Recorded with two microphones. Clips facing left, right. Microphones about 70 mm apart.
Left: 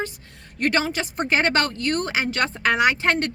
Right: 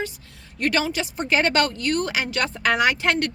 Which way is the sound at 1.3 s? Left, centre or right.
Left.